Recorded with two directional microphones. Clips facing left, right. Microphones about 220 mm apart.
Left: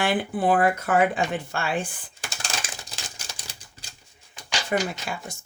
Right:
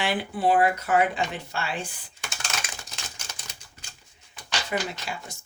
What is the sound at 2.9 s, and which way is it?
Typewriter, 35° left (ahead or behind).